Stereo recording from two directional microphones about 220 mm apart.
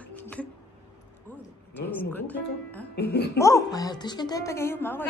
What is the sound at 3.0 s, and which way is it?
Speech, 50° left (ahead or behind).